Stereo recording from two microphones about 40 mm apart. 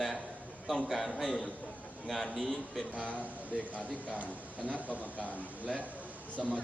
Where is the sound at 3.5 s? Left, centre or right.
Left.